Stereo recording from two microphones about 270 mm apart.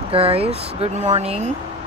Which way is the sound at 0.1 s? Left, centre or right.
Right.